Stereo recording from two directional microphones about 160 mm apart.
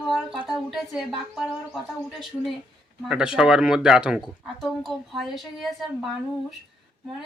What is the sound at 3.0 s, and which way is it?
Speech, 5° right (ahead or behind).